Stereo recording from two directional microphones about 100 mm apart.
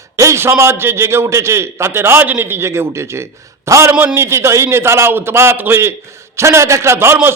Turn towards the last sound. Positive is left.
turn(degrees=-25)  # may be behind; listen again after turning